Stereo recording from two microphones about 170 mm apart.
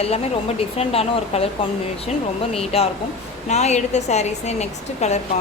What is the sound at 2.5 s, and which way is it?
A woman's voice, 35° left (ahead or behind).